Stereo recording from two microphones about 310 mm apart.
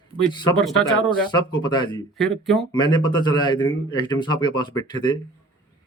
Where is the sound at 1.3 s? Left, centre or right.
Centre.